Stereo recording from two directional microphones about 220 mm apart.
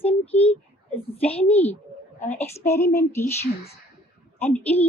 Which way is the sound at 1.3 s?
25° left (ahead or behind).